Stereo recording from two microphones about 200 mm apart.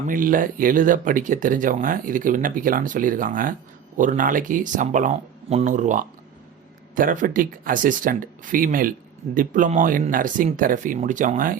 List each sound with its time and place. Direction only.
0.1 s speech: 40° right (ahead or behind)